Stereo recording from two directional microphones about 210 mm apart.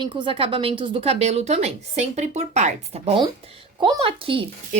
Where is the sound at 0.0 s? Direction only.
25° right (ahead or behind).